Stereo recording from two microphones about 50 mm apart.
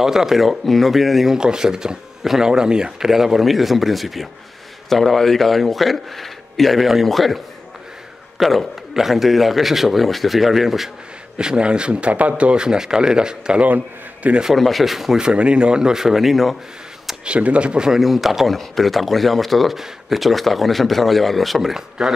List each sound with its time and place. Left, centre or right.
0.0 s speech: centre
1.3 s speech: centre
11.3 s speech: centre
13.6 s a man's voice: right
14.6 s speech: centre
15.2 s speech: right; by 16.5 s centre
17.2 s a man's voice: right
17.9 s speech: centre